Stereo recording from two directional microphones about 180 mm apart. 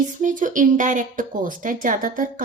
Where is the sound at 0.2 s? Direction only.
45° right (ahead or behind).